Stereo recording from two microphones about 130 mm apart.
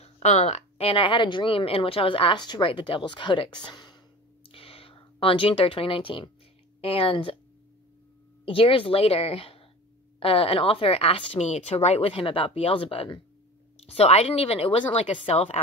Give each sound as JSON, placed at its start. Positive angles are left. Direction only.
{"t": 0.0, "sound": "a woman's voice", "side_deg": 60}
{"t": 8.5, "sound": "speech", "side_deg": 45}